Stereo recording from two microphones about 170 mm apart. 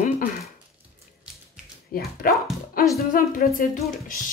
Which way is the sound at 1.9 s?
60° left (ahead or behind).